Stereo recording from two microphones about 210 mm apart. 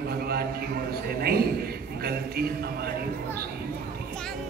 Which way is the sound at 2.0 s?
50° right (ahead or behind).